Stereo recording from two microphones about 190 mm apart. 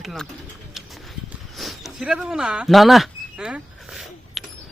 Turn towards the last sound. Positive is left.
turn(degrees=-5)  # may be behind; listen again after turning